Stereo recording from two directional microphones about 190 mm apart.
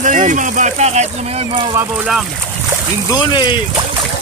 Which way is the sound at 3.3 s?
25° left (ahead or behind).